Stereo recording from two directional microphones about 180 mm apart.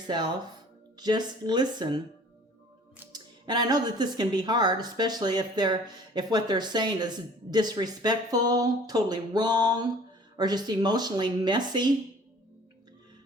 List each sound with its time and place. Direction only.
0.9 s speech: 20° right (ahead or behind)
3.1 s speech: 25° right (ahead or behind)